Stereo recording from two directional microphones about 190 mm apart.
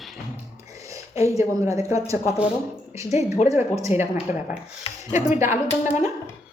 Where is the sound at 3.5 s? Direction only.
15° right (ahead or behind).